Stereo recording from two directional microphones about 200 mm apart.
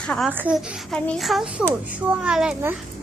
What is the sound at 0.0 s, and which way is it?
Speech, 5° left (ahead or behind).